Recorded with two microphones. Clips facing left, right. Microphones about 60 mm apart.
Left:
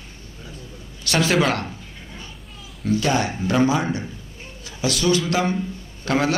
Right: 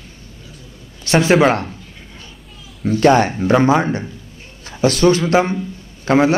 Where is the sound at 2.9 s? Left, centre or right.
Right.